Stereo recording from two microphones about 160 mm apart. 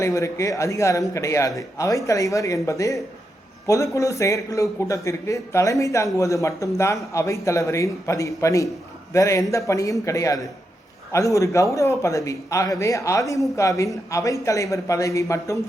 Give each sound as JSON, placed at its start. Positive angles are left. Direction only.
{"t": 0.0, "sound": "a man's voice", "side_deg": 20}